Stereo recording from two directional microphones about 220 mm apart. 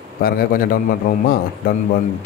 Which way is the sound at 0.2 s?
40° left (ahead or behind).